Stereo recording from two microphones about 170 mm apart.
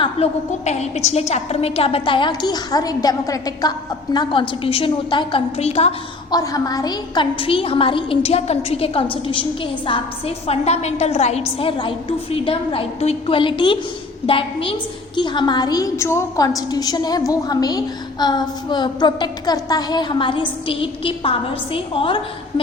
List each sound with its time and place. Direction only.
0.0 s a woman's voice: 40° left (ahead or behind)
6.3 s a woman's voice: 20° left (ahead or behind)